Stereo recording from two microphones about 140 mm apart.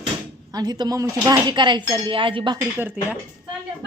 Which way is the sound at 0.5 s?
30° right (ahead or behind).